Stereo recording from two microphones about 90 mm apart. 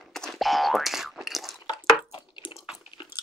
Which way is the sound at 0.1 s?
Centre (ahead or behind).